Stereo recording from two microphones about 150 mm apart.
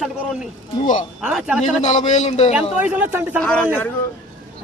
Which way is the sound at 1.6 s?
55° left (ahead or behind).